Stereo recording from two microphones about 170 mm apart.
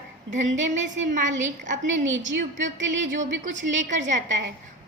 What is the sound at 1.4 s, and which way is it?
Speech, 45° right (ahead or behind).